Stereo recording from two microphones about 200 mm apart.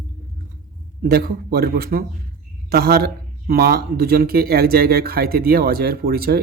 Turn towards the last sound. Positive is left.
turn(degrees=-50)  # may be behind; listen again after turning